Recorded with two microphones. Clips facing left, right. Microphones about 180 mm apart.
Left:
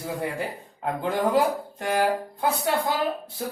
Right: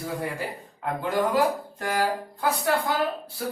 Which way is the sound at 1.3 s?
20° left (ahead or behind).